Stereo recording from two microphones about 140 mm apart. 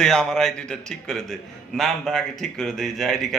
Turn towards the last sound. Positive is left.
turn(degrees=0)  # may be behind; listen again after turning